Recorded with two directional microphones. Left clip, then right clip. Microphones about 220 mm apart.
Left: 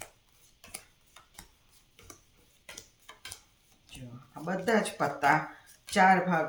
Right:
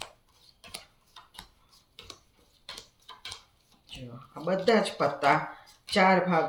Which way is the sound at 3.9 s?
10° left (ahead or behind).